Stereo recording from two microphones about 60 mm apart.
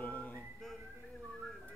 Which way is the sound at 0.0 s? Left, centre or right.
Left.